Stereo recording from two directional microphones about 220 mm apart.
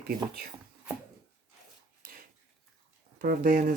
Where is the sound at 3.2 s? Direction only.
40° right (ahead or behind).